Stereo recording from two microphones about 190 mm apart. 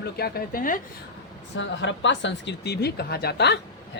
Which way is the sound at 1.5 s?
75° left (ahead or behind).